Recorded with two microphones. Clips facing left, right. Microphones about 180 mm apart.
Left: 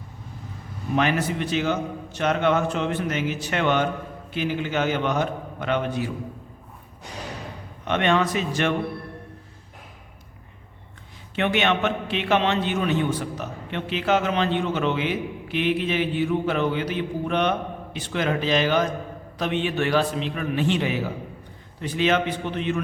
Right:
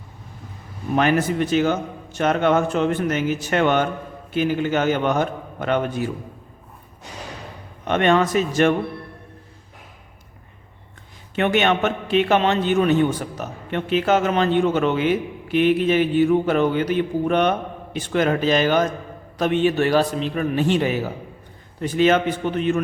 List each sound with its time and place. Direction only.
0.9 s a man's voice: 45° right (ahead or behind)
7.9 s a man's voice: 45° right (ahead or behind)
11.3 s a man's voice: 45° right (ahead or behind)